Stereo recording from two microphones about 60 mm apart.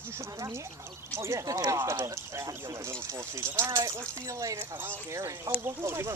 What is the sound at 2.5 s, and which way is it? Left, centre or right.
Speech, right.